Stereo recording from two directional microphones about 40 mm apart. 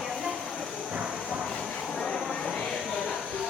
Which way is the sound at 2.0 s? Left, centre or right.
Centre.